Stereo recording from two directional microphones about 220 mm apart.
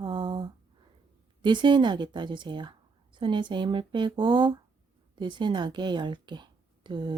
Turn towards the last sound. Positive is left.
turn(degrees=-20)  # may be behind; listen again after turning